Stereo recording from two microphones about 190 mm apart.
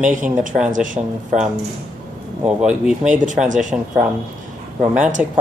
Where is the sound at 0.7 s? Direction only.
45° right (ahead or behind).